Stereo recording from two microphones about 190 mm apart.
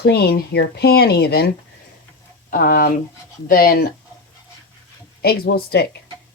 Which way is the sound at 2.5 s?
45° left (ahead or behind).